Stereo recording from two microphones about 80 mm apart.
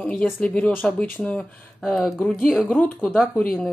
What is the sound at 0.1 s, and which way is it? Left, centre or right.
Speech, centre.